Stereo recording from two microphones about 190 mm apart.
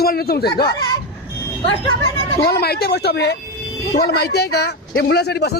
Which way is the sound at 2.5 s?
55° left (ahead or behind).